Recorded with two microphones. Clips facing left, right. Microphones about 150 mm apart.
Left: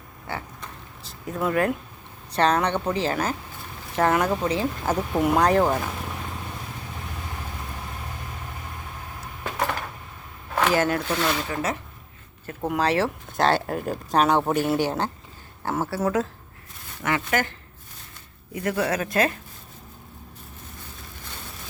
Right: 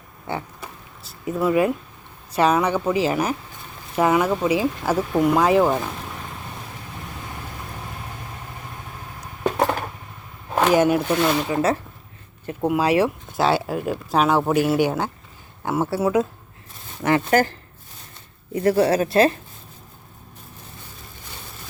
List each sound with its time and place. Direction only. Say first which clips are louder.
1.3 s speech: right 4 dB; 5° right (ahead or behind)
10.5 s speech: right 5 dB; 15° right (ahead or behind)
12.6 s speech: right 4 dB; 10° right (ahead or behind)
17.0 s speech: right 7 dB; 35° right (ahead or behind)
18.5 s speech: right 7 dB; 35° right (ahead or behind)